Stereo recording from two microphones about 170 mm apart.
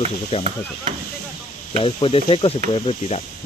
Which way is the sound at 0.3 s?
35° left (ahead or behind).